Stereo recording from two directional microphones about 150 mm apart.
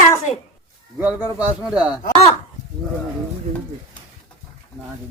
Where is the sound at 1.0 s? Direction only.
10° right (ahead or behind).